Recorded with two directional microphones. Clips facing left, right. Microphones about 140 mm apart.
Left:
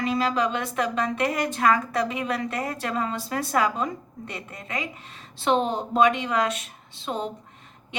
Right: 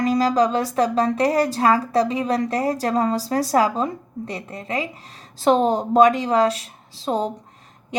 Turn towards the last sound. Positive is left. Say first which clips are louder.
# right 7 dB
turn(degrees=-40)  # may be behind; listen again after turning